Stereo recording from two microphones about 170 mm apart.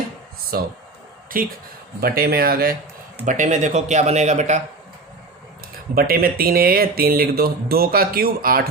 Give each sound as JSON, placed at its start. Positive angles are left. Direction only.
{"t": 0.5, "sound": "speech", "side_deg": -65}
{"t": 3.2, "sound": "speech", "side_deg": -45}
{"t": 5.7, "sound": "speech", "side_deg": -60}